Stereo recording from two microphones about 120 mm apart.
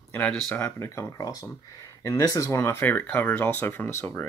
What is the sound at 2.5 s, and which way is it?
Speech, 20° left (ahead or behind).